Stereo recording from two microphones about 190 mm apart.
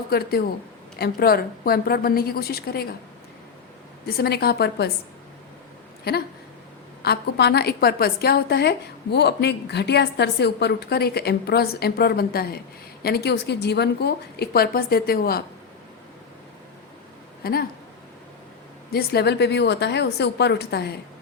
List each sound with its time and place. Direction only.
0.1 s a woman's voice: 55° left (ahead or behind)
4.0 s a woman's voice: 55° left (ahead or behind)
6.1 s a woman's voice: 55° left (ahead or behind)
17.4 s speech: 55° left (ahead or behind)
18.9 s a woman's voice: 55° left (ahead or behind)